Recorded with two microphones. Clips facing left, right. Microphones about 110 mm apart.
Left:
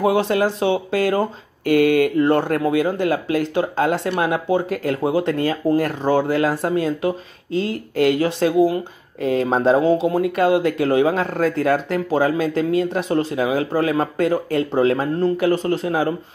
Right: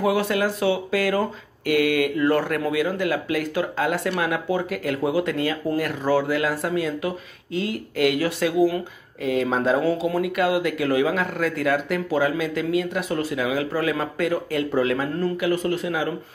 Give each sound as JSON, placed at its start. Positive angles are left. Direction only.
{"t": 0.0, "sound": "speech", "side_deg": 30}